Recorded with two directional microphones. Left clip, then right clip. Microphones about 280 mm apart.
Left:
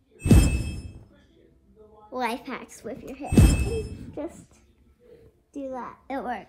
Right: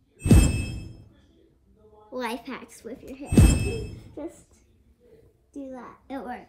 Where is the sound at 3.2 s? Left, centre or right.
Centre.